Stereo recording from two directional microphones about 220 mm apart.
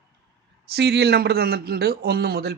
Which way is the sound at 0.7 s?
50° right (ahead or behind).